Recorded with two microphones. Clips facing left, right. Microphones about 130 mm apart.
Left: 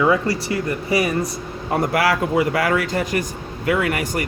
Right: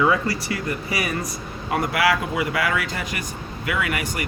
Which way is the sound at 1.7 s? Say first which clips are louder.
Left 2 dB; 40° left (ahead or behind).